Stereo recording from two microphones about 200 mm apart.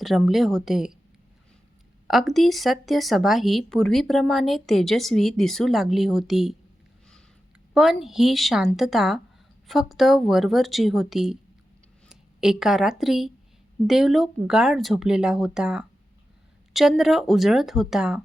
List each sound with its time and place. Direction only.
0.0 s speech: centre (ahead or behind)
2.0 s speech: centre (ahead or behind)
7.7 s a woman's voice: centre (ahead or behind)